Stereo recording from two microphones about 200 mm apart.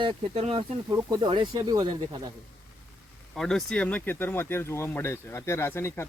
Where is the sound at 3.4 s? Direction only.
5° left (ahead or behind).